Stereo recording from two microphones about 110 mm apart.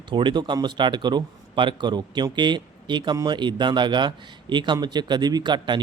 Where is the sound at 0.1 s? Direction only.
45° right (ahead or behind).